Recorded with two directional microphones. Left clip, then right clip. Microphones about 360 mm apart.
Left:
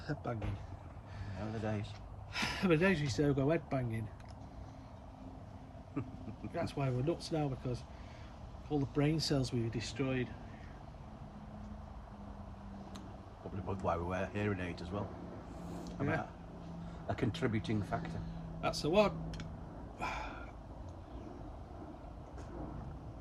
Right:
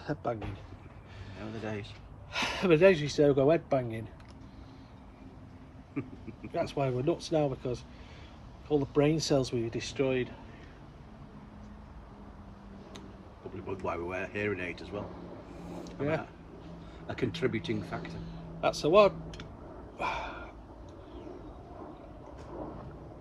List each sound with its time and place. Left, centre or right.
0.0 s speech: centre
1.6 s speech: centre
2.3 s speech: centre
6.0 s speech: centre
6.5 s speech: centre
8.9 s speech: centre
9.6 s speech: right
9.8 s speech: centre
13.7 s speech: centre
16.0 s speech: centre
17.1 s speech: centre
18.6 s speech: centre
20.0 s a sound: centre